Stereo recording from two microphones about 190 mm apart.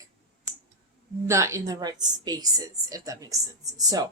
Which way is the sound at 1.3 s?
15° right (ahead or behind).